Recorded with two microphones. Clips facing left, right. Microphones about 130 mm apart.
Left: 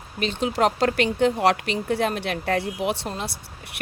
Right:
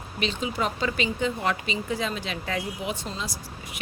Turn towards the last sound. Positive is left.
turn(degrees=60)  # may be behind; listen again after turning